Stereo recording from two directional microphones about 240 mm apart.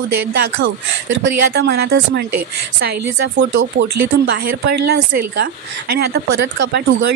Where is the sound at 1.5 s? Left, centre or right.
Right.